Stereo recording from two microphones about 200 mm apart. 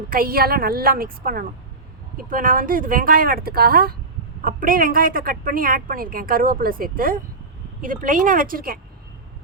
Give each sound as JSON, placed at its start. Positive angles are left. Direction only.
{"t": 0.1, "sound": "a woman's voice", "side_deg": -45}